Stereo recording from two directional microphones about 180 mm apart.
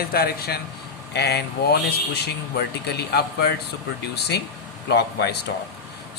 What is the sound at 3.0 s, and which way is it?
A man's voice, 65° left (ahead or behind).